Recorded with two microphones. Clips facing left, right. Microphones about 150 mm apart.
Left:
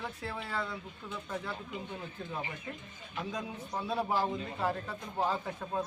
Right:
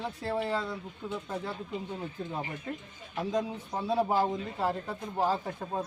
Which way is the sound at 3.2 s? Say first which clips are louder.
Right 7 dB; 25° right (ahead or behind).